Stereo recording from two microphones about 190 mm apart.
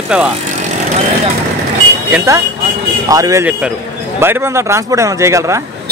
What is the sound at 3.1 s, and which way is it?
Speech, 15° right (ahead or behind).